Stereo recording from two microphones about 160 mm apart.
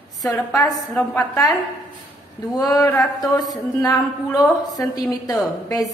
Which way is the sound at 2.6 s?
20° left (ahead or behind).